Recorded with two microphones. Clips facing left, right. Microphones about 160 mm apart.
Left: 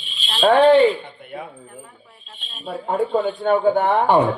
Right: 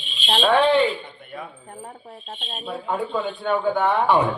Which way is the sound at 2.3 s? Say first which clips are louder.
Right 8 dB; 55° right (ahead or behind).